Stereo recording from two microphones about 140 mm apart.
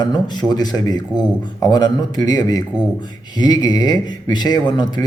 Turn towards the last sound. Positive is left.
turn(degrees=30)  # may be behind; listen again after turning